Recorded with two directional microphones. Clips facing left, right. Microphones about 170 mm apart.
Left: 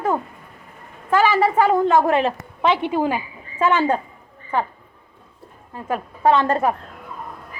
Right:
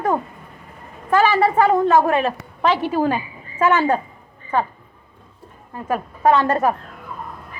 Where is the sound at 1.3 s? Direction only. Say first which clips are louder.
Even; 10° left (ahead or behind).